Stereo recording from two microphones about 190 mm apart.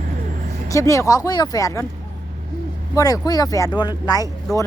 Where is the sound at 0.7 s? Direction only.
15° left (ahead or behind).